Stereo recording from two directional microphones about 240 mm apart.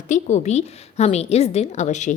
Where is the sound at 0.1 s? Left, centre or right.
Left.